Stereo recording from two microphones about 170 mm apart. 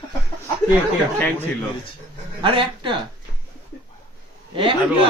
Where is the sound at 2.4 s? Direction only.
30° right (ahead or behind).